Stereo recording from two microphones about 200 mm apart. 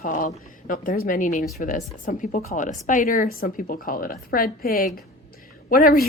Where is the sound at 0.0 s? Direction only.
40° left (ahead or behind).